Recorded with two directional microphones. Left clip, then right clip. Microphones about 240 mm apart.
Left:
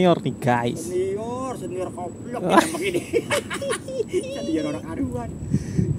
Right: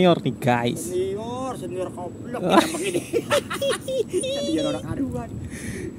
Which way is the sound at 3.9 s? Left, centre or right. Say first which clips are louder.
Right 2 dB; centre.